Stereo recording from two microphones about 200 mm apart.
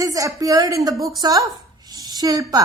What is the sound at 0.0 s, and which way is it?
Speech, 15° right (ahead or behind).